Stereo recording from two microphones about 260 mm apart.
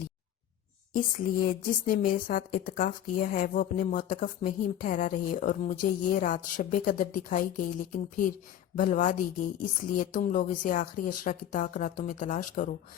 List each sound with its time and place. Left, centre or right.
0.9 s a woman's voice: left